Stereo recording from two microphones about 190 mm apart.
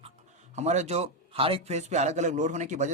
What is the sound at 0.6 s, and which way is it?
A man's voice, 35° right (ahead or behind).